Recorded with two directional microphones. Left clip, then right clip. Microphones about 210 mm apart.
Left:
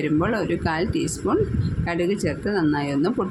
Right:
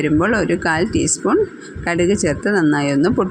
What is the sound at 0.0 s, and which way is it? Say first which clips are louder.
Speech: right 6 dB; 25° right (ahead or behind).